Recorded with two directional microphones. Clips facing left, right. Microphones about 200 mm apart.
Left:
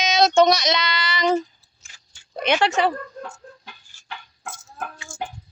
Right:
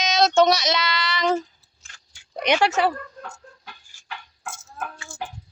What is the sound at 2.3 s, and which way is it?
Child singing, 15° right (ahead or behind).